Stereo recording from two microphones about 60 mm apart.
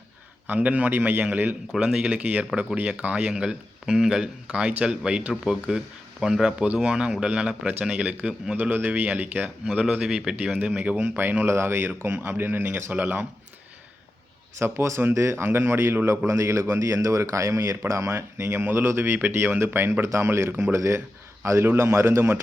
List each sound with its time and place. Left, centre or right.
0.4 s a man's voice: right
8.7 s a man's voice: right
9.9 s a man's voice: centre; by 11.4 s right
11.4 s speech: right
14.6 s a man's voice: right
16.2 s a man's voice: right